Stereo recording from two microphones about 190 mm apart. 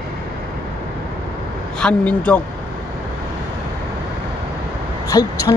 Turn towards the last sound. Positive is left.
turn(degrees=15)  # may be behind; listen again after turning